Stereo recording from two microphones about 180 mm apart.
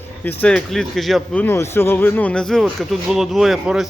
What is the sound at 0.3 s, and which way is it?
A man's voice, 10° left (ahead or behind).